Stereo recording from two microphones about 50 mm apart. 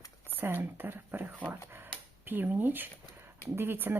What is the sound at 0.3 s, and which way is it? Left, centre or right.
Speech, right.